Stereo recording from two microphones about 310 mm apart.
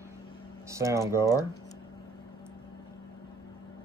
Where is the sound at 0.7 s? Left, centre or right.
Centre.